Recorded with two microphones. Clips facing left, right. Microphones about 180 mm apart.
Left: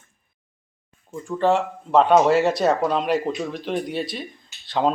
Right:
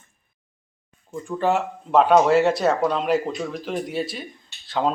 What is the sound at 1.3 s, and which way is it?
Speech, 5° right (ahead or behind).